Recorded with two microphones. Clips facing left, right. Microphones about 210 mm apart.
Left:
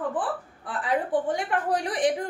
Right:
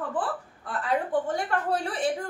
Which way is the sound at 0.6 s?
15° left (ahead or behind).